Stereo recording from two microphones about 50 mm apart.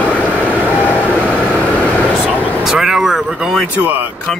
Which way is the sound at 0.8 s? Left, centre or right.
Left.